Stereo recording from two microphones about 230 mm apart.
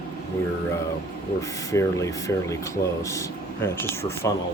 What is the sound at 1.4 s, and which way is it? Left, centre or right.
Speech, centre.